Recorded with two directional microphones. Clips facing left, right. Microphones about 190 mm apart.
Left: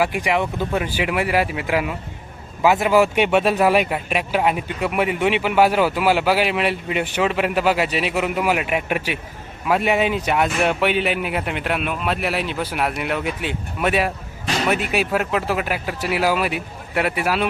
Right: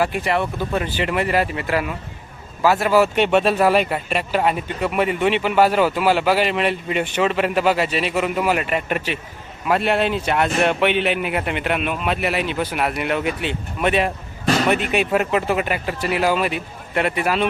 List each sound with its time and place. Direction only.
0.0 s speech: 15° left (ahead or behind)
14.4 s a sound: 40° right (ahead or behind)
14.7 s speech: 5° left (ahead or behind)